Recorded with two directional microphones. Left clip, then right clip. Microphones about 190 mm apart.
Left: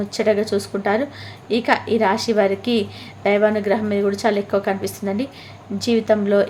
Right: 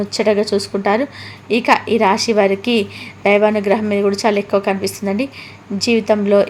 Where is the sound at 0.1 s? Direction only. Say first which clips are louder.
Right 3 dB; 15° right (ahead or behind).